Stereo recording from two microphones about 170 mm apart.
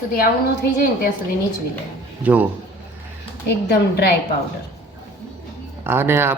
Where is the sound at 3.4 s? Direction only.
70° left (ahead or behind).